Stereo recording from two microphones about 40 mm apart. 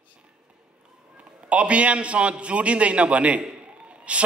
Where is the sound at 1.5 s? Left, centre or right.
Right.